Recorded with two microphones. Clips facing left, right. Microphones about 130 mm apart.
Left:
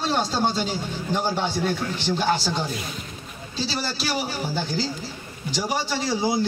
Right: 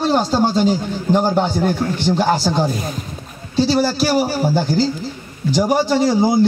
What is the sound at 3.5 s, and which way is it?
Speech, 60° right (ahead or behind).